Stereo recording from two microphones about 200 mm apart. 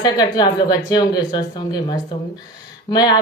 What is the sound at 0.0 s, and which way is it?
A woman's voice, 20° left (ahead or behind).